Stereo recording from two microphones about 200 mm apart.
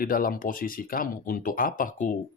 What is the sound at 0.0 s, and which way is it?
Speech, 45° left (ahead or behind).